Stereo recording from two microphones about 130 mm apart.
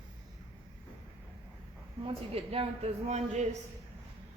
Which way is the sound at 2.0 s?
45° right (ahead or behind).